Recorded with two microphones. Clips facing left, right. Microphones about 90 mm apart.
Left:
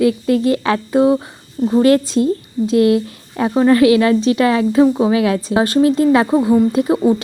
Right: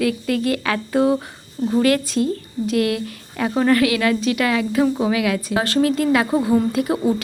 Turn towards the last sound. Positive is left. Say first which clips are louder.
# left 6 dB
turn(degrees=25)  # may be behind; listen again after turning